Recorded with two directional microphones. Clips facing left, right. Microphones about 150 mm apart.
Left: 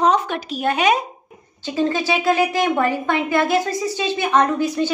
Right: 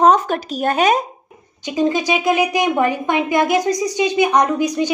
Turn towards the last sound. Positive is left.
turn(degrees=-15)  # may be behind; listen again after turning